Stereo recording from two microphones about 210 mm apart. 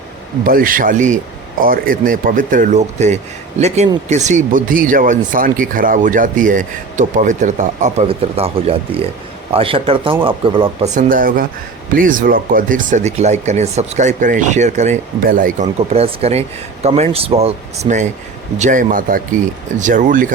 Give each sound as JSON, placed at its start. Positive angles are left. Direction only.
{"t": 0.4, "sound": "speech", "side_deg": -40}
{"t": 10.9, "sound": "speech", "side_deg": -40}